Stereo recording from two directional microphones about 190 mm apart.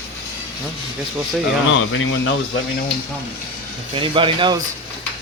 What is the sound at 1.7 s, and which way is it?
Speech, 90° left.